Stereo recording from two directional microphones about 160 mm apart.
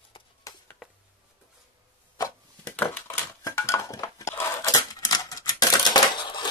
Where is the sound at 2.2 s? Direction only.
10° left (ahead or behind); by 6.4 s 30° left (ahead or behind).